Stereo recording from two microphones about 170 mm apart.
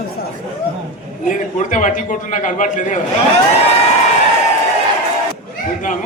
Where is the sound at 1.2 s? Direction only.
50° left (ahead or behind).